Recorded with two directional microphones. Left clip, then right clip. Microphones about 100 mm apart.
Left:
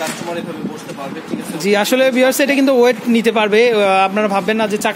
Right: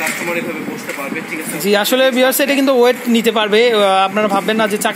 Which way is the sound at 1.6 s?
30° left (ahead or behind).